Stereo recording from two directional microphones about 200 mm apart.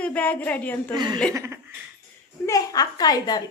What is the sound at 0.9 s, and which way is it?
Speech, 20° right (ahead or behind).